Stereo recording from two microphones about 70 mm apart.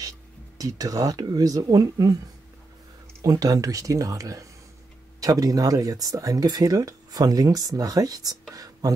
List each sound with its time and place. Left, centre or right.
0.6 s speech: right
3.2 s speech: right
8.5 s whispering: right